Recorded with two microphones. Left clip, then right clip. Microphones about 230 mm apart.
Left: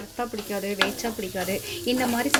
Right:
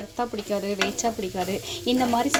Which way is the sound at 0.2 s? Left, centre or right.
Centre.